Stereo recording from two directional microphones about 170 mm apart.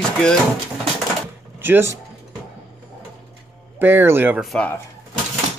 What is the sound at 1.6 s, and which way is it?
Speech, 15° right (ahead or behind).